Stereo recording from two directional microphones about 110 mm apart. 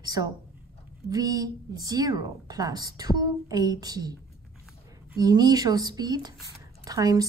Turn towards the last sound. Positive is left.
turn(degrees=-35)  # may be behind; listen again after turning